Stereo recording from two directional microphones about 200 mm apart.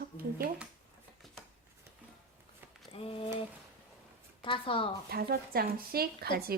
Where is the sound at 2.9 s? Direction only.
25° left (ahead or behind).